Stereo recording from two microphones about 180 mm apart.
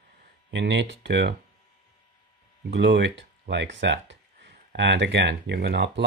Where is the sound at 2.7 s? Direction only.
75° right (ahead or behind).